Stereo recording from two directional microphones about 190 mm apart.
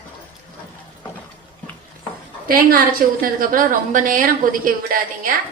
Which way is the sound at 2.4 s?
50° right (ahead or behind).